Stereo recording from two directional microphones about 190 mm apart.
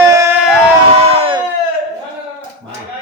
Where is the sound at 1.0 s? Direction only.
30° right (ahead or behind).